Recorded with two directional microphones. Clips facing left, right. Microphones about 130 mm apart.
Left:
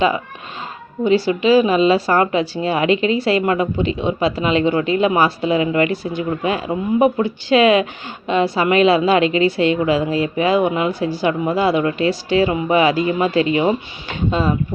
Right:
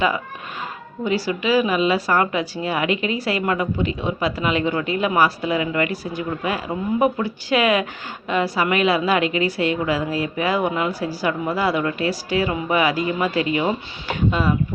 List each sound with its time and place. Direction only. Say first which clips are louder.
1.0 s speech: left 7 dB; 25° left (ahead or behind)